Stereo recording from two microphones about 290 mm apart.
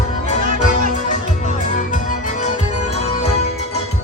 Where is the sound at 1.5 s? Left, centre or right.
Left.